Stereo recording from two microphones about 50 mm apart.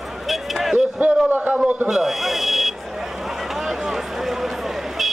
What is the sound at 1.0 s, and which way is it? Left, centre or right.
Speech, right.